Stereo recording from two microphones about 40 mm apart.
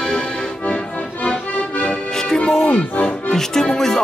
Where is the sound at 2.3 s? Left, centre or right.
Centre.